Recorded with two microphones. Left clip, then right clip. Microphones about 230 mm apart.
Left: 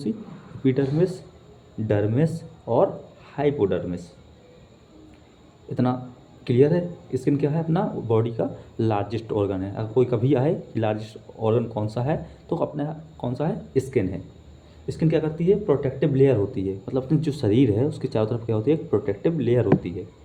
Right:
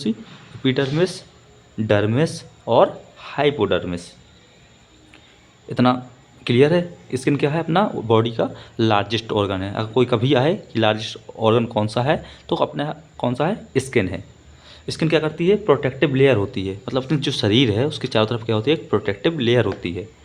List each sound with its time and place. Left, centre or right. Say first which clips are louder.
0.6 s speech: right 3 dB; right
5.7 s speech: right 7 dB; right